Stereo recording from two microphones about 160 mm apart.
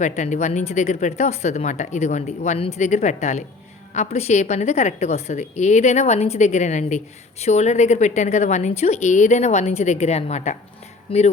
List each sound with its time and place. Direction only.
0.0 s a woman's voice: 50° left (ahead or behind)